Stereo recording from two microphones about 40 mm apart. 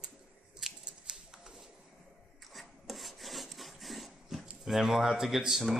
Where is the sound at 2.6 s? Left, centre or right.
Centre.